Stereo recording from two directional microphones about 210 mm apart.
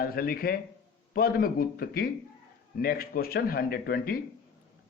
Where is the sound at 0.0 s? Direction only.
45° left (ahead or behind).